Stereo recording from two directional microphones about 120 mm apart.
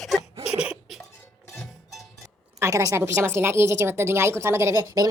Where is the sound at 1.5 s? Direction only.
Centre (ahead or behind).